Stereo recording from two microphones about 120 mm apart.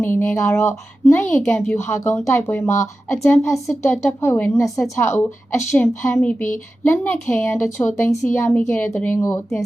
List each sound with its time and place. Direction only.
0.0 s speech: 20° left (ahead or behind)